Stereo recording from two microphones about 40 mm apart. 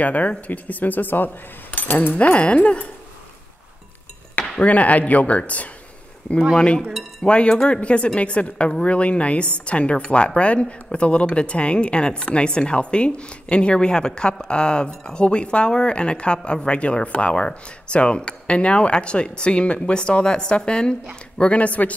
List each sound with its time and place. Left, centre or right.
0.0 s a woman's voice: left
2.3 s a woman's voice: left
4.4 s speech: left
6.9 s speech: centre
7.2 s a woman's voice: left